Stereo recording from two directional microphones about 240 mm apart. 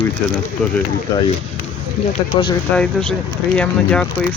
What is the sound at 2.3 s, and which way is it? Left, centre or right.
Speech, centre.